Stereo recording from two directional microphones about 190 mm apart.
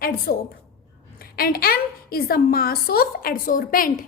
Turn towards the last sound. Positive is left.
turn(degrees=50)  # may be behind; listen again after turning